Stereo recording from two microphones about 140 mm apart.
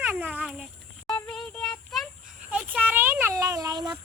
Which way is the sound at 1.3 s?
5° left (ahead or behind).